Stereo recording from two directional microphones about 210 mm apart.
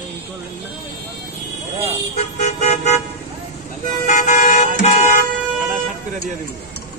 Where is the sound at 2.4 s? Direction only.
35° left (ahead or behind).